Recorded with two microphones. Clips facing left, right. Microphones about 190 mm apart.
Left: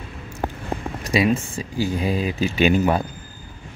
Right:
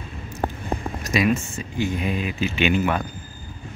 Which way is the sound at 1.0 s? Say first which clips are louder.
Left 2 dB; 30° left (ahead or behind).